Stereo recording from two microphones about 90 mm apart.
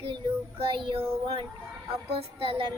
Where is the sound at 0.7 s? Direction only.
75° right (ahead or behind).